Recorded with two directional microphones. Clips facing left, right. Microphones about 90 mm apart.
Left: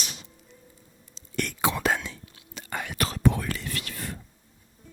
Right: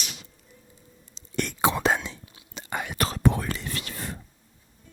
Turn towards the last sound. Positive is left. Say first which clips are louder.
# right 1 dB
turn(degrees=-25)  # may be behind; listen again after turning